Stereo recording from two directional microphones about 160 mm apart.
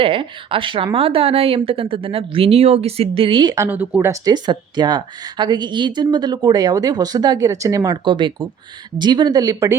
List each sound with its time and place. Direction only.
0.0 s speech: 35° right (ahead or behind); by 4.2 s 15° right (ahead or behind)
4.3 s a woman's voice: 25° right (ahead or behind)